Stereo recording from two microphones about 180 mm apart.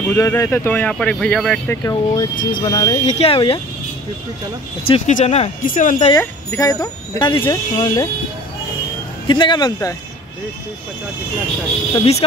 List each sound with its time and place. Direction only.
0.0 s speech: 15° left (ahead or behind)
1.8 s speech: 20° left (ahead or behind)
3.1 s speech: 35° left (ahead or behind)
4.8 s speech: 30° left (ahead or behind)
6.1 s speech: 20° left (ahead or behind)
9.3 s speech: 25° left (ahead or behind)
11.9 s speech: 30° left (ahead or behind)